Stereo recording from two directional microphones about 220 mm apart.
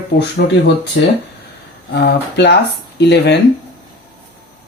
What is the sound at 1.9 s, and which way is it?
Speech, 50° left (ahead or behind).